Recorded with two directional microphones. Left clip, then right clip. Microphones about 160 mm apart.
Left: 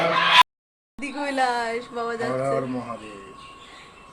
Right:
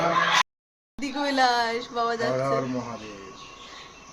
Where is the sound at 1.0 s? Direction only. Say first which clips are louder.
Right 1 dB; 5° right (ahead or behind).